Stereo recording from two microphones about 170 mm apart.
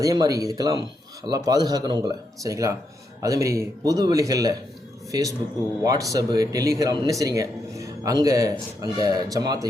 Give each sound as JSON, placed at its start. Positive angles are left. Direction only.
{"t": 0.0, "sound": "a man's voice", "side_deg": -20}
{"t": 5.8, "sound": "a man's voice", "side_deg": -20}